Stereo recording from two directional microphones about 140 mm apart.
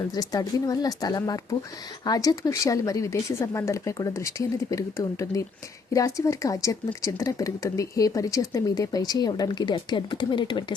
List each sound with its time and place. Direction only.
0.1 s speech: 25° left (ahead or behind)